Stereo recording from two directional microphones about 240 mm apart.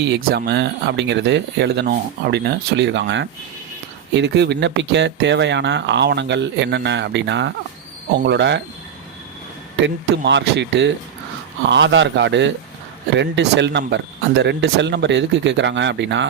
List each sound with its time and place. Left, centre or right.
0.0 s speech: right
9.7 s speech: right